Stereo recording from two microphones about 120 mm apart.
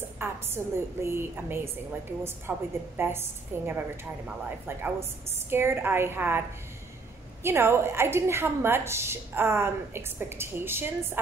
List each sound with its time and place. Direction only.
0.2 s a sound: 20° right (ahead or behind)
0.6 s a woman's voice: 20° right (ahead or behind)
7.4 s a woman's voice: 20° right (ahead or behind)